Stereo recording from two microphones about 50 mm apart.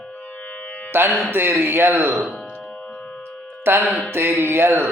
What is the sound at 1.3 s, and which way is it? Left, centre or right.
Speech, right.